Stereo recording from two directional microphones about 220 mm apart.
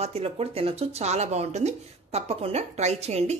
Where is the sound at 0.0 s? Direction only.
25° right (ahead or behind).